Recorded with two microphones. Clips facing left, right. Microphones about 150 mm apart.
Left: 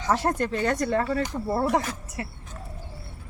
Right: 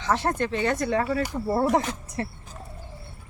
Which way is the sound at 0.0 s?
5° left (ahead or behind).